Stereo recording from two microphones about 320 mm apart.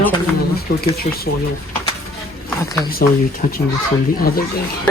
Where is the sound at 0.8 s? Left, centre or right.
Left.